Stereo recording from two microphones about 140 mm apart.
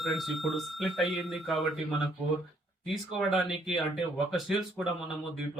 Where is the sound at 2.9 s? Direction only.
5° right (ahead or behind).